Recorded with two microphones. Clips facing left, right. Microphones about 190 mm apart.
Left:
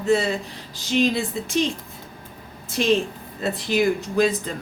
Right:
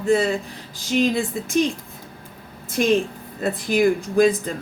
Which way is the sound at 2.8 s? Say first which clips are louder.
Right 1 dB; 50° right (ahead or behind).